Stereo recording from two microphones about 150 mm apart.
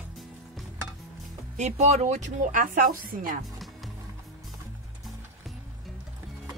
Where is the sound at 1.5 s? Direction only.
50° right (ahead or behind); by 3.4 s 65° right (ahead or behind).